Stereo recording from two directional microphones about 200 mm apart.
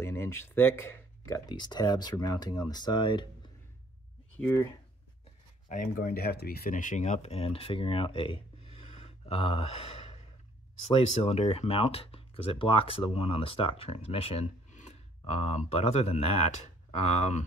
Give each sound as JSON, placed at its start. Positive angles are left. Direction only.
{"t": 0.0, "sound": "speech", "side_deg": 10}
{"t": 4.4, "sound": "speech", "side_deg": 10}
{"t": 5.7, "sound": "speech", "side_deg": 45}
{"t": 11.2, "sound": "speech", "side_deg": 30}